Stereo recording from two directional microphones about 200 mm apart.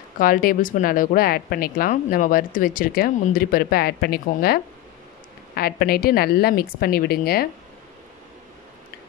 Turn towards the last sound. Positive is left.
turn(degrees=50)  # may be behind; listen again after turning